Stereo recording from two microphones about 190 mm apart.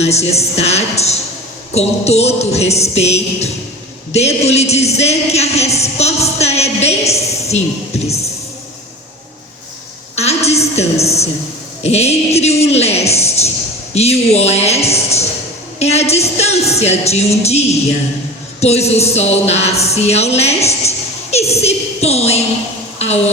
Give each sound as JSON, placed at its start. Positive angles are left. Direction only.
{"t": 0.0, "sound": "a man's voice", "side_deg": 35}
{"t": 10.2, "sound": "a woman's voice", "side_deg": 35}